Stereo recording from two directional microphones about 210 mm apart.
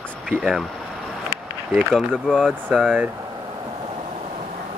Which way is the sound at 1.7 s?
Centre (ahead or behind).